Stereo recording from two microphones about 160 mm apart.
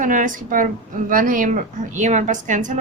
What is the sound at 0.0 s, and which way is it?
A woman's voice, 55° right (ahead or behind).